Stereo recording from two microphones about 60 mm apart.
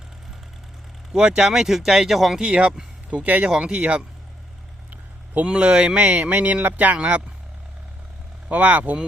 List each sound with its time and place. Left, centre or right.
1.1 s speech: centre
2.4 s speech: centre
4.9 s vehicle: right
5.5 s speech: centre
8.4 s speech: right